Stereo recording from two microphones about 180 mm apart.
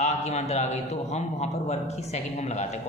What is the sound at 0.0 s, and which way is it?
A man's voice, 40° left (ahead or behind).